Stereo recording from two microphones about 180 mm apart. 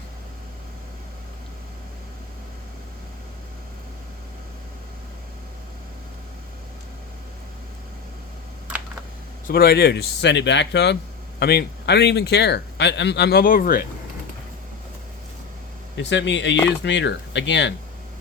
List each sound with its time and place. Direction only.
9.5 s speech: 60° left (ahead or behind)
11.3 s speech: 65° left (ahead or behind)
16.0 s speech: 80° left